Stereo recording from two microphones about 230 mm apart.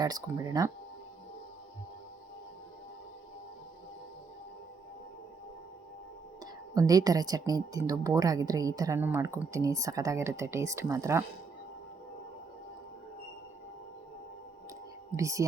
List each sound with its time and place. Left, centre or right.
0.0 s speech: centre
6.4 s speech: centre
15.1 s speech: centre